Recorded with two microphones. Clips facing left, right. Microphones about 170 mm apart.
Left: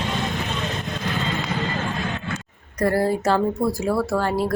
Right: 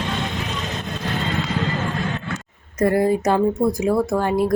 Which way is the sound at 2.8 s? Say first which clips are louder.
Right 3 dB; 20° right (ahead or behind).